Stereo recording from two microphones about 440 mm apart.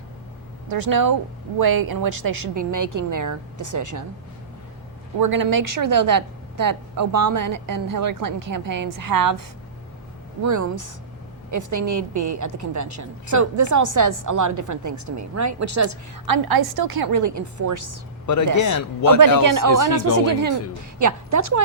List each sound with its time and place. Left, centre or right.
0.7 s a woman's voice: right
5.2 s a woman's voice: right
10.4 s a woman's voice: right
16.2 s a woman's voice: right
18.3 s speech: left
19.4 s a woman's voice: right
21.0 s a woman's voice: right